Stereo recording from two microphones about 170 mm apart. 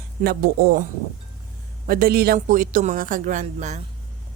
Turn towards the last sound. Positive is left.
turn(degrees=-45)  # may be behind; listen again after turning